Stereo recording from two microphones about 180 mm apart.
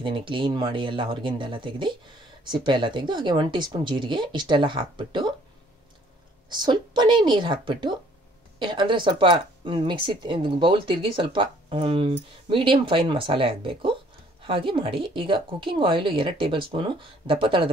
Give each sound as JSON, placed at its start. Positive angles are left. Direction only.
{"t": 0.0, "sound": "speech", "side_deg": -30}
{"t": 6.5, "sound": "speech", "side_deg": -25}